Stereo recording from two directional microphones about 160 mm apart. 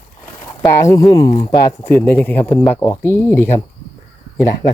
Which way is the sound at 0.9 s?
20° left (ahead or behind).